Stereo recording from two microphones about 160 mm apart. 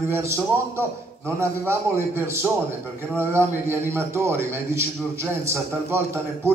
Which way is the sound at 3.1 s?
15° right (ahead or behind).